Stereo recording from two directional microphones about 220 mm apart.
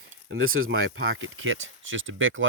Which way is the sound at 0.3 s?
70° right (ahead or behind).